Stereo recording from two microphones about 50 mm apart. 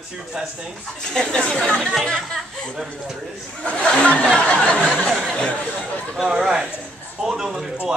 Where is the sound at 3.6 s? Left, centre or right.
Left.